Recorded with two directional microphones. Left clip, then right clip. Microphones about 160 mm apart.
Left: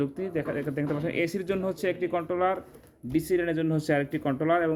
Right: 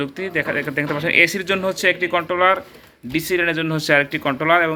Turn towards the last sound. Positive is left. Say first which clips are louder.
# right 9 dB
turn(degrees=20)  # may be behind; listen again after turning